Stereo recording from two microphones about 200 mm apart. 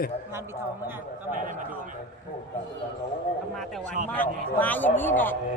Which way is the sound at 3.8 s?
40° right (ahead or behind).